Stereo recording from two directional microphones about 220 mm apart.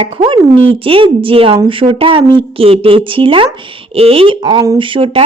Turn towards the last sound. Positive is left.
turn(degrees=-25)  # may be behind; listen again after turning